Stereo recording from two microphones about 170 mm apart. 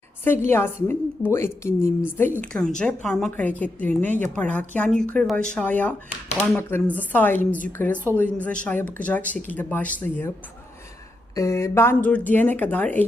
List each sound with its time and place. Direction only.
0.3 s a woman's voice: 15° left (ahead or behind)
11.3 s a woman's voice: 15° left (ahead or behind)